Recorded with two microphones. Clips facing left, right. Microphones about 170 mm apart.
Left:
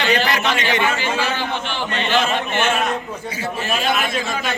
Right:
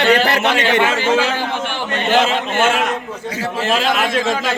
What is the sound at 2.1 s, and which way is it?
A man's voice, 90° right.